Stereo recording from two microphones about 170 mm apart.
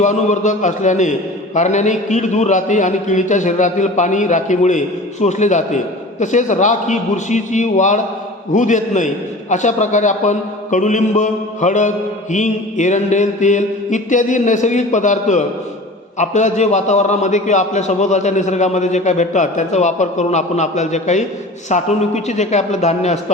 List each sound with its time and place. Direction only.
0.0 s a man's voice: 45° left (ahead or behind)